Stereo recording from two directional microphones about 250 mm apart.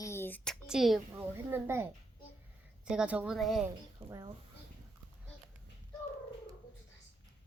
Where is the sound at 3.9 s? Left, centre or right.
Centre.